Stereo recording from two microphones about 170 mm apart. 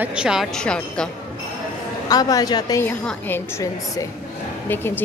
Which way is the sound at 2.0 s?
20° left (ahead or behind).